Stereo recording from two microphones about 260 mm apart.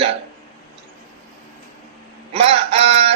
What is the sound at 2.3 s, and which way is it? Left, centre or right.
Speech, right.